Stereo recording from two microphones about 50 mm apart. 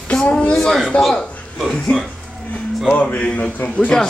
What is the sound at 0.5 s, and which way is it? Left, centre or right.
Speech, centre.